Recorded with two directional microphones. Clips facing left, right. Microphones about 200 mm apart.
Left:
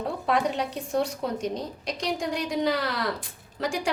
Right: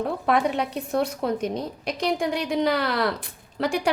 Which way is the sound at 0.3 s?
60° right (ahead or behind).